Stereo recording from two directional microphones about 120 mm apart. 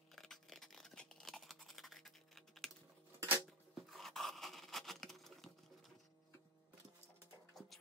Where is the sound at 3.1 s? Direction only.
15° right (ahead or behind).